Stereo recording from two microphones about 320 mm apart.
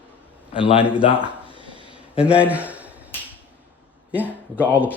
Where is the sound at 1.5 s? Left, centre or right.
Centre.